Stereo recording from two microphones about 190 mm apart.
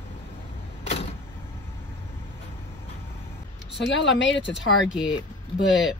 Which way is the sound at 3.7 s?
70° left (ahead or behind).